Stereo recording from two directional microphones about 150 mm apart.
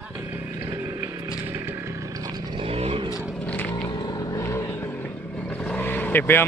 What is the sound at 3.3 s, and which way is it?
Vehicle, 10° left (ahead or behind).